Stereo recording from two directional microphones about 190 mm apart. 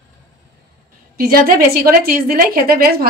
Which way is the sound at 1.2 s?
50° right (ahead or behind).